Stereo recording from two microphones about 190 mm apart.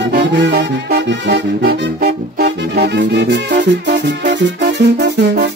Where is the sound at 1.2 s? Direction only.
55° right (ahead or behind).